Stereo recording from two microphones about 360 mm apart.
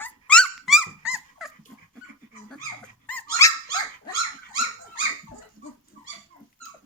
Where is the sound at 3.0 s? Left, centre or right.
Centre.